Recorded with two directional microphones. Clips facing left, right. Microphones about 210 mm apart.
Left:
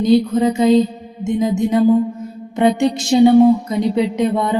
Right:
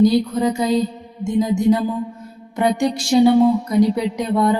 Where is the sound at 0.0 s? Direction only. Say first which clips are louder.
Left 2 dB; 20° left (ahead or behind).